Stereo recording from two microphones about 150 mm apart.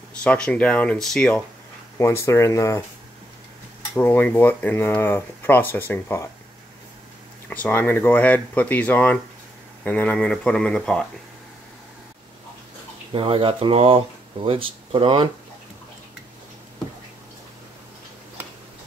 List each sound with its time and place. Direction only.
0.2 s speech: 10° left (ahead or behind)
2.0 s speech: 20° left (ahead or behind)
3.9 s speech: 15° left (ahead or behind)
7.4 s speech: 10° left (ahead or behind)
13.1 s speech: 35° right (ahead or behind)